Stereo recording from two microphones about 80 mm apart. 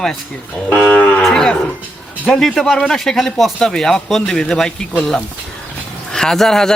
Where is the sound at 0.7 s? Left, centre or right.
Left.